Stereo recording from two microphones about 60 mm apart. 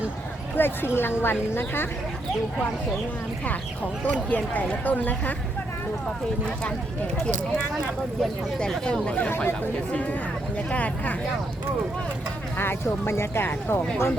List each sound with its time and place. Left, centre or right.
0.5 s a woman's voice: left
4.1 s speech: left
9.0 s speech: left
12.5 s speech: left